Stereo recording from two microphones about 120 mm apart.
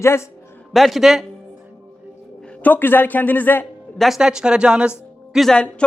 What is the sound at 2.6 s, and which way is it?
A man's voice, 15° left (ahead or behind).